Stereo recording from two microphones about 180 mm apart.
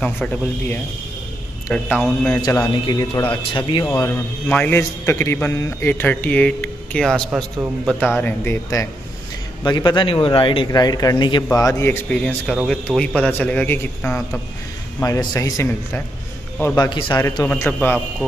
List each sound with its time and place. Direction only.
0.0 s a man's voice: 5° left (ahead or behind)
2.4 s speech: 20° left (ahead or behind)
3.8 s a man's voice: 15° left (ahead or behind)
8.2 s a man's voice: 10° left (ahead or behind)
15.0 s a man's voice: 20° left (ahead or behind)
17.5 s a man's voice: 10° left (ahead or behind)